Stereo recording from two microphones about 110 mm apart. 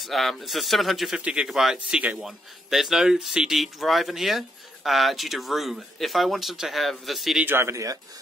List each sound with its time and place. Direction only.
0.0 s speech: centre (ahead or behind)
7.4 s speech: 20° right (ahead or behind)